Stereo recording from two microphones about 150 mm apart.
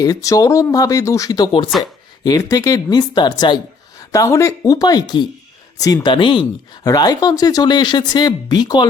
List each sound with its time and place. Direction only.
0.0 s speech: 20° left (ahead or behind)